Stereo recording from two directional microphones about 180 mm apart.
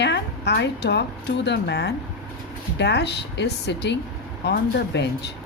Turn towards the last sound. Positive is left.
turn(degrees=70)  # may be behind; listen again after turning